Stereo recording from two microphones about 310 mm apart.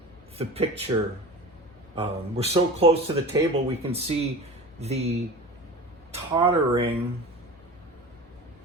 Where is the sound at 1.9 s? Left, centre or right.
Centre.